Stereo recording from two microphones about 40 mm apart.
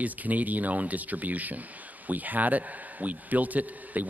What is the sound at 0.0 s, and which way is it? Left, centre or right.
A man's voice, right.